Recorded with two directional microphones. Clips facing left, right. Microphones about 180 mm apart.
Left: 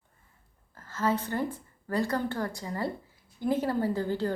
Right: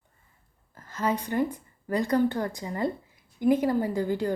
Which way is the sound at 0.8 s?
15° right (ahead or behind).